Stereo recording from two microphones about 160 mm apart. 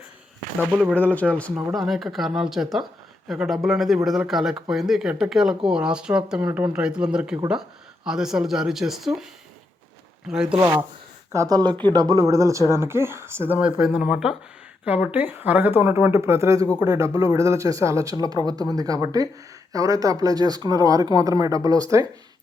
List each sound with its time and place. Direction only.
0.6 s speech: 10° right (ahead or behind)
0.9 s speech: 10° left (ahead or behind)
1.5 s speech: 5° right (ahead or behind)
10.2 s speech: 5° right (ahead or behind); by 22.0 s 20° right (ahead or behind)